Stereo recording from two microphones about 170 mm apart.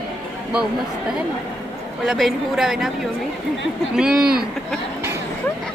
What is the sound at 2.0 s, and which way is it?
A woman's voice, centre (ahead or behind).